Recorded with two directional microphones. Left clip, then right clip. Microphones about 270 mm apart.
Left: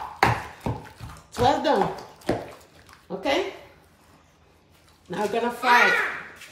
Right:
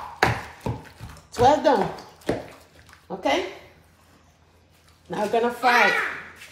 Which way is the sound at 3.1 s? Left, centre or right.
Centre.